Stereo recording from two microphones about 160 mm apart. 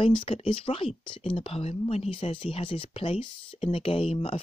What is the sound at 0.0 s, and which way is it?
Speech, 35° left (ahead or behind).